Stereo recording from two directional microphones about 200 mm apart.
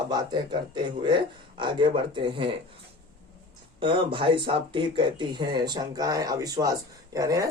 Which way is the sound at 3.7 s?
25° right (ahead or behind).